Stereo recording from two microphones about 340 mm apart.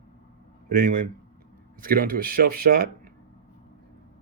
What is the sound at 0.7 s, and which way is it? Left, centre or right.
Speech, right.